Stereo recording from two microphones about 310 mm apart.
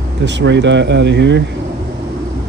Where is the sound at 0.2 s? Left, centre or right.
Right.